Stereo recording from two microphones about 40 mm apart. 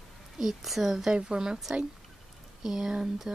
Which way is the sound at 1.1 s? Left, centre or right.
Right.